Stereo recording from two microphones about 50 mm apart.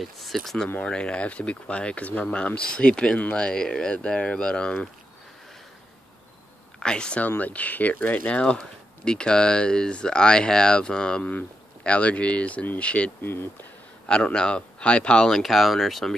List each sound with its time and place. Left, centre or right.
0.0 s speech: centre
0.8 s speech: left
6.8 s speech: centre
7.2 s speech: left
13.2 s speech: left
14.0 s speech: centre
15.2 s speech: centre